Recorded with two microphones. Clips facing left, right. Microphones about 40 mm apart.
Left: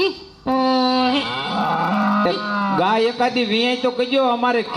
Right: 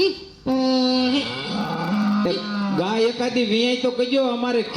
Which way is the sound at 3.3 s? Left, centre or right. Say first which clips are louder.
Left 1 dB; left.